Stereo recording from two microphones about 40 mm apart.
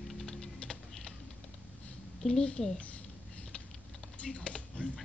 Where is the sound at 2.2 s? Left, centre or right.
Centre.